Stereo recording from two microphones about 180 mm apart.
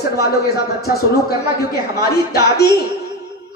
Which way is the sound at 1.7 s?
60° left (ahead or behind).